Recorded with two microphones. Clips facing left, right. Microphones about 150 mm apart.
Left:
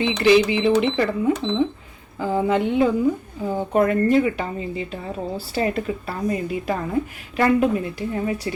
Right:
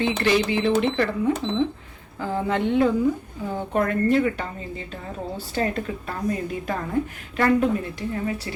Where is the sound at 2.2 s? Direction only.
10° left (ahead or behind).